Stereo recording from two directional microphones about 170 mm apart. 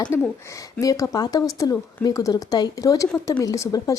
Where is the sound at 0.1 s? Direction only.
15° left (ahead or behind).